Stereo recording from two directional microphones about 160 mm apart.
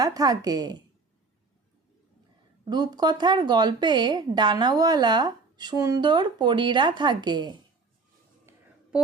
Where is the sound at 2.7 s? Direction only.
25° right (ahead or behind).